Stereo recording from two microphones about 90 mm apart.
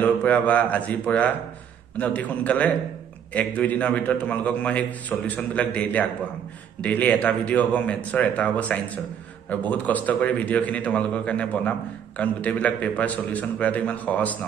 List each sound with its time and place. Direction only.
0.0 s a man's voice: 15° left (ahead or behind)